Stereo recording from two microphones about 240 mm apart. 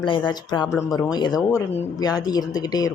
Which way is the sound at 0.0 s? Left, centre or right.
Centre.